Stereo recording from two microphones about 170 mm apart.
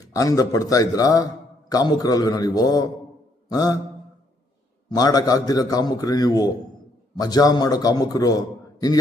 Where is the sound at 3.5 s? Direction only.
25° left (ahead or behind).